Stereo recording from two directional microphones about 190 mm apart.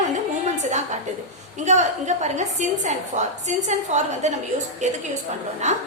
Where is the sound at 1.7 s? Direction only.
40° right (ahead or behind).